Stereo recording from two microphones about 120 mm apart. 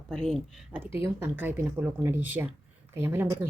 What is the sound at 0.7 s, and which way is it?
Speech, 20° right (ahead or behind).